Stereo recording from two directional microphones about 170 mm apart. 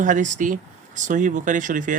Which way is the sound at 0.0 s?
50° right (ahead or behind).